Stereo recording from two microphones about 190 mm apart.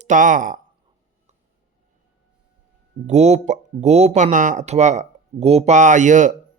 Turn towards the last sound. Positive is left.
turn(degrees=-40)  # may be behind; listen again after turning